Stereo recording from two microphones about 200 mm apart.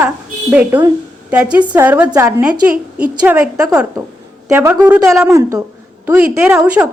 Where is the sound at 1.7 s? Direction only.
10° right (ahead or behind).